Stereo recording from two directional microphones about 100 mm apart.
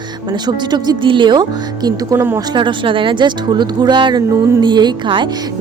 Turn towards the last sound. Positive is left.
turn(degrees=-50)  # may be behind; listen again after turning